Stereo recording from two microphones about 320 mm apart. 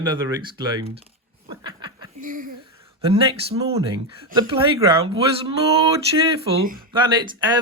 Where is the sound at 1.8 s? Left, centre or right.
Right.